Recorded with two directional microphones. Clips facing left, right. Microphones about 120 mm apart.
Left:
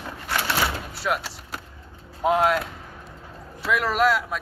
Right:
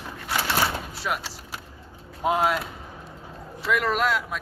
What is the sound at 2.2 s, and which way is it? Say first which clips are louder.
Speech: left 3 dB; centre (ahead or behind).